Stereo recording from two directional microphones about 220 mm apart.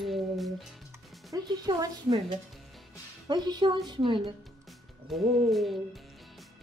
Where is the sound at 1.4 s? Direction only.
20° right (ahead or behind).